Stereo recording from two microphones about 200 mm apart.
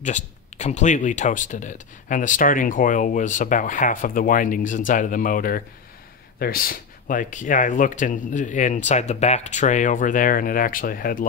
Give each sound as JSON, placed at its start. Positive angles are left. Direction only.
{"t": 0.0, "sound": "speech", "side_deg": 35}